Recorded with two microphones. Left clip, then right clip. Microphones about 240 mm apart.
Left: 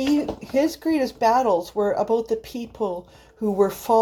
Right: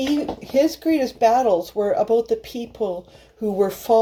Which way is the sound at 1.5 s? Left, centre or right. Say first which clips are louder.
Right 2 dB; left.